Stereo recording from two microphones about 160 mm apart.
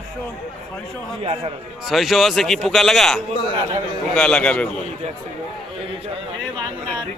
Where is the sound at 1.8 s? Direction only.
Centre (ahead or behind).